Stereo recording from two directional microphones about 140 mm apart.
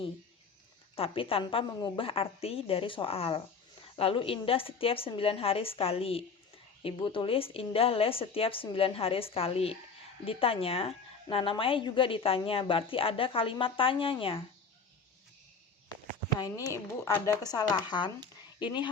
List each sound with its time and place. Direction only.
0.9 s a woman's voice: 40° left (ahead or behind)
16.7 s a woman's voice: 20° left (ahead or behind)